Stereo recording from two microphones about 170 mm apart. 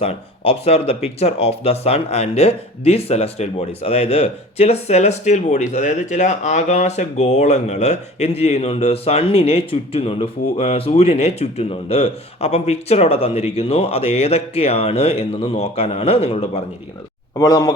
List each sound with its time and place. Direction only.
0.6 s speech: 35° left (ahead or behind)
17.3 s a man's voice: 20° left (ahead or behind)